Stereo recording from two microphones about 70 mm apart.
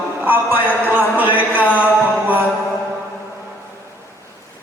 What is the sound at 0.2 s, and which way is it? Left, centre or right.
Music, right.